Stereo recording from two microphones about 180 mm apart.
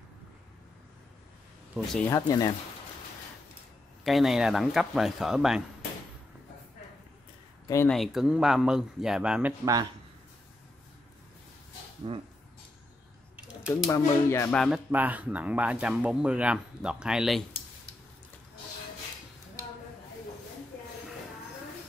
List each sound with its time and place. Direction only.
2.0 s speech: 15° left (ahead or behind)
4.0 s speech: centre (ahead or behind)
7.6 s speech: 15° left (ahead or behind)
7.9 s speech: centre (ahead or behind)
12.1 s speech: 30° right (ahead or behind)
13.7 s speech: 15° left (ahead or behind)
14.6 s speech: 5° right (ahead or behind)